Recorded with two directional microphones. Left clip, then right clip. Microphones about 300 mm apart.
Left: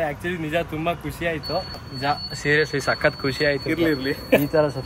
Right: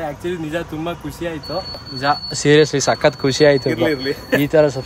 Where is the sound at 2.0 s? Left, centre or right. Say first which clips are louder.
Right 6 dB; centre.